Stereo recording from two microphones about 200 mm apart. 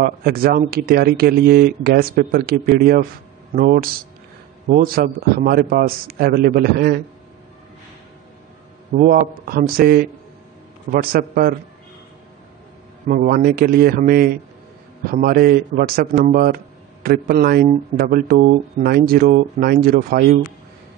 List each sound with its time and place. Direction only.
0.0 s speech: 50° right (ahead or behind)
8.9 s speech: 45° right (ahead or behind)
13.1 s speech: 45° right (ahead or behind)